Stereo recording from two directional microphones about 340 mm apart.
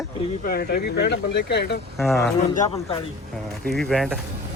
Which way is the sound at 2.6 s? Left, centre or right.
Centre.